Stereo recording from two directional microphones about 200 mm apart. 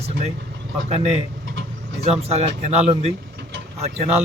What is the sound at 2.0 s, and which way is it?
Speech, 30° right (ahead or behind).